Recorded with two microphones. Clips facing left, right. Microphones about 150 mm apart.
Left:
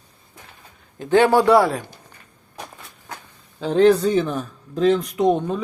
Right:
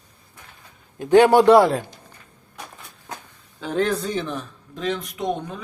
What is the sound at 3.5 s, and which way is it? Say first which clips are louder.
Speech: left 8 dB; 30° left (ahead or behind).